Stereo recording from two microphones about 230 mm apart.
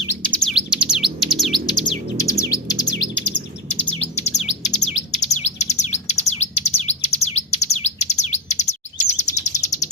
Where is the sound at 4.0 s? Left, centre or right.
Left.